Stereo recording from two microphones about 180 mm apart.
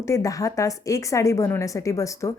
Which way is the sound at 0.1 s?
20° left (ahead or behind).